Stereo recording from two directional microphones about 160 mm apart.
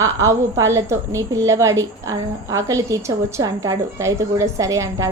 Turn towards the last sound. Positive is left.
turn(degrees=-20)  # may be behind; listen again after turning